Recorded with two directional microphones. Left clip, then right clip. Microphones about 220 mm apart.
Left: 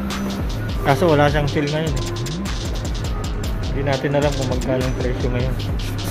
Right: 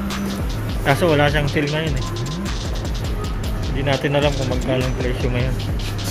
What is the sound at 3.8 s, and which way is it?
Speech, centre (ahead or behind).